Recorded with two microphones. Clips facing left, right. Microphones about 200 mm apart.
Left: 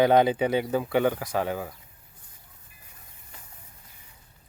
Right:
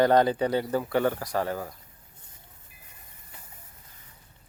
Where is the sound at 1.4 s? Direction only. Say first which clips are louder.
Left 1 dB; 15° left (ahead or behind).